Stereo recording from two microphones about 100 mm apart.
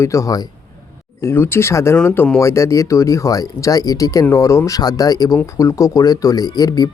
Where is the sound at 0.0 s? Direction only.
30° left (ahead or behind).